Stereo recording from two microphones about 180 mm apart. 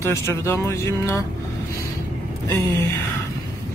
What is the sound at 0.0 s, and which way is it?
Speech, 15° left (ahead or behind).